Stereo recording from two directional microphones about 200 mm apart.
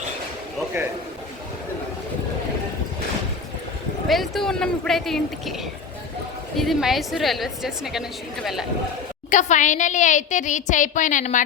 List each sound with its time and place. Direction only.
4.1 s speech: centre (ahead or behind)
6.6 s speech: centre (ahead or behind)
9.3 s a woman's voice: 40° left (ahead or behind)